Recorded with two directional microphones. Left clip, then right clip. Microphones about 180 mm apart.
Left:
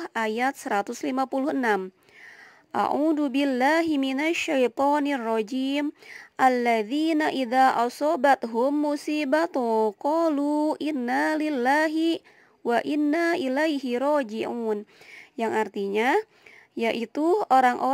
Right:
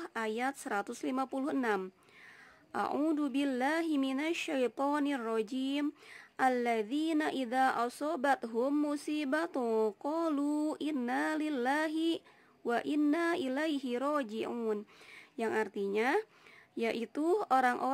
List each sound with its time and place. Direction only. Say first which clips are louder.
0.0 s speech: left 9 dB; 35° left (ahead or behind)